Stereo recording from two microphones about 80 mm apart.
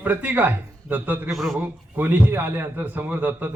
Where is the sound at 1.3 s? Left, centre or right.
Centre.